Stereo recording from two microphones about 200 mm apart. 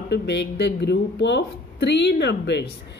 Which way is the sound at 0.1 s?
60° left (ahead or behind).